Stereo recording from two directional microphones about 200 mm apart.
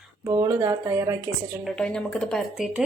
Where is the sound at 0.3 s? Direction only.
15° right (ahead or behind).